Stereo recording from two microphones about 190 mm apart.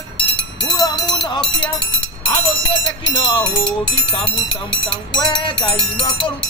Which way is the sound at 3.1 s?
25° left (ahead or behind).